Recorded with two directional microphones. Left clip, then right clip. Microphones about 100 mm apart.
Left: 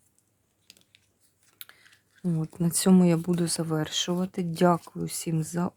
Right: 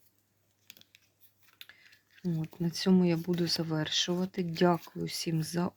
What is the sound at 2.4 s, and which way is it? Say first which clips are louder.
Speech: left 6 dB; 60° left (ahead or behind).